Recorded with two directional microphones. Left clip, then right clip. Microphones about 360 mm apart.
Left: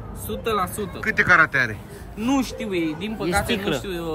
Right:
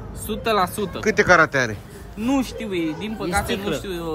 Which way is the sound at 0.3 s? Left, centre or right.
Right.